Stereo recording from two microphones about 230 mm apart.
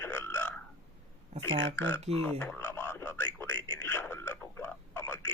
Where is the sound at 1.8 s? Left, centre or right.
Centre.